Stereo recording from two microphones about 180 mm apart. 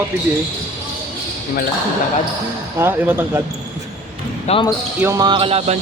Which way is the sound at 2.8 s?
15° right (ahead or behind).